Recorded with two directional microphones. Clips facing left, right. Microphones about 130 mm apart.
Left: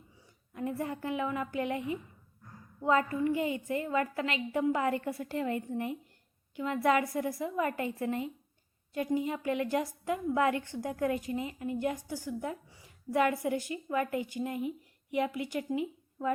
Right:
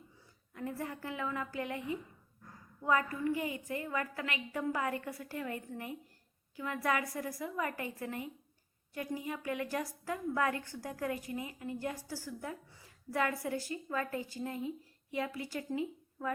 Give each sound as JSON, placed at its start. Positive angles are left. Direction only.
{"t": 0.5, "sound": "a woman's voice", "side_deg": 20}